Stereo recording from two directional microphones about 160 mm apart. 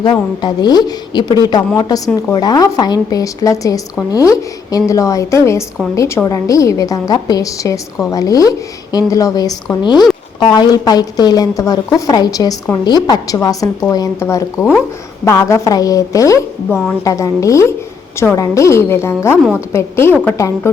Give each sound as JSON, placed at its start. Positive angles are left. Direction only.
{"t": 0.0, "sound": "a woman's voice", "side_deg": 30}